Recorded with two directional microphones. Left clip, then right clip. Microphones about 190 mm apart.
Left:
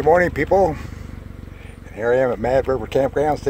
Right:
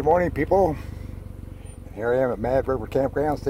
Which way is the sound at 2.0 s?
5° left (ahead or behind).